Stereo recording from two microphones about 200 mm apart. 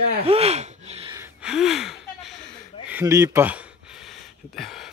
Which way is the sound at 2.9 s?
15° right (ahead or behind).